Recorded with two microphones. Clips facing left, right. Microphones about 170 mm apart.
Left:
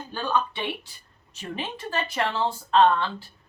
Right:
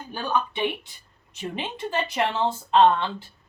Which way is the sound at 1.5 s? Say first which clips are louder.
Right 2 dB; 20° right (ahead or behind).